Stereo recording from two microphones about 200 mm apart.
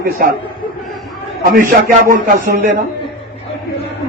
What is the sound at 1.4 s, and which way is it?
A man's voice, 40° right (ahead or behind).